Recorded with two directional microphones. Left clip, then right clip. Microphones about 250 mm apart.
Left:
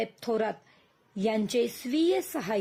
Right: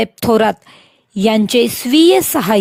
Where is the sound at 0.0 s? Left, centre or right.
Right.